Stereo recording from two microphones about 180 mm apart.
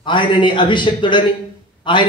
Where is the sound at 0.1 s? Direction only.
25° left (ahead or behind).